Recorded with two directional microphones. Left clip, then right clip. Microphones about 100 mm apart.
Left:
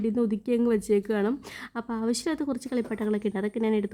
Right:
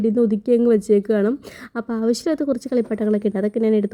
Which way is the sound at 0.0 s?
35° right (ahead or behind).